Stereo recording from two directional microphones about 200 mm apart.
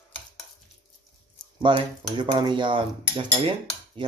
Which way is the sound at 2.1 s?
25° right (ahead or behind).